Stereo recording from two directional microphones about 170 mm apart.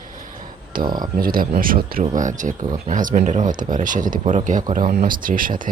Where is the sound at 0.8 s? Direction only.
25° right (ahead or behind).